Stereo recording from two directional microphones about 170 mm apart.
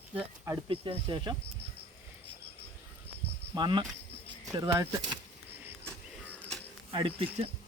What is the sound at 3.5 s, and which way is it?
Cricket, 25° right (ahead or behind).